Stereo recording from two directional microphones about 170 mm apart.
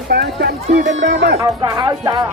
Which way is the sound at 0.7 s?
45° right (ahead or behind).